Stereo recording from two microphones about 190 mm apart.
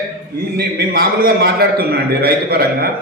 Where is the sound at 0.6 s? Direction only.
55° right (ahead or behind).